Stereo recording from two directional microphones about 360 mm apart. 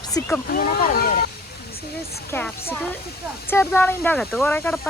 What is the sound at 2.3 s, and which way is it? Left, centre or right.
Speech, centre.